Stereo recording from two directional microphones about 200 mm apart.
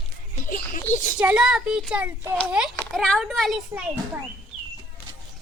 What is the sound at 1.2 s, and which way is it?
Speech, 5° right (ahead or behind).